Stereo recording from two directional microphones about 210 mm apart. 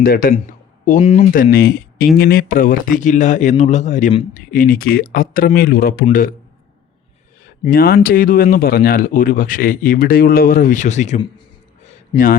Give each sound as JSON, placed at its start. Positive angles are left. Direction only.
{"t": 0.0, "sound": "a man's voice", "side_deg": 45}
{"t": 0.9, "sound": "speech", "side_deg": 30}
{"t": 7.6, "sound": "speech", "side_deg": 45}